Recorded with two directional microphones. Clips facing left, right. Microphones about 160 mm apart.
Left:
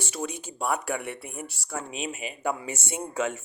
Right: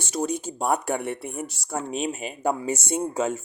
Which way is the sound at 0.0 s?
40° right (ahead or behind).